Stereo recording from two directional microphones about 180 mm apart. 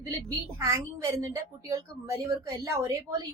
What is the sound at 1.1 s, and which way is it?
A woman's voice, 15° right (ahead or behind).